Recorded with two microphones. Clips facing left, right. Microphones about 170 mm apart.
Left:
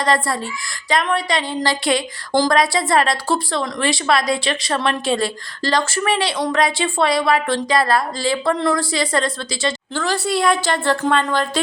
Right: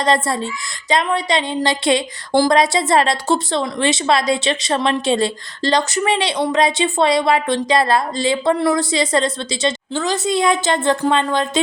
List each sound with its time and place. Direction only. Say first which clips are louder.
0.0 s speech: right 2 dB; 25° right (ahead or behind)